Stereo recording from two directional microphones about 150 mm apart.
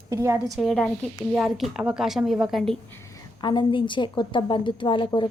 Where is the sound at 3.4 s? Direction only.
35° left (ahead or behind).